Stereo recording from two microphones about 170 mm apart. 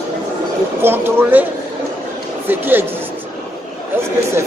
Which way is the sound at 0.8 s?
15° right (ahead or behind).